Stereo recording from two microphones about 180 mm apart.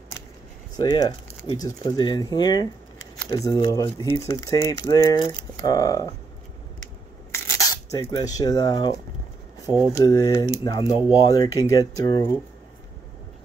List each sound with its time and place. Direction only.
0.7 s speech: 25° left (ahead or behind)
7.3 s speech: 15° left (ahead or behind)
9.9 s speech: 20° left (ahead or behind)